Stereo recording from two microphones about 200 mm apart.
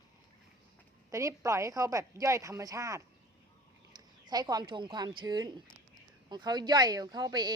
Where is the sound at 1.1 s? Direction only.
15° right (ahead or behind).